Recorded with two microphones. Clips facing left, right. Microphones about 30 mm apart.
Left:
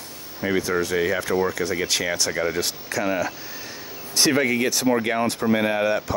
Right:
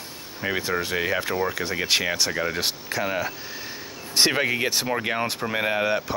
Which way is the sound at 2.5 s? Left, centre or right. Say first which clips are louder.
Left 1 dB; right.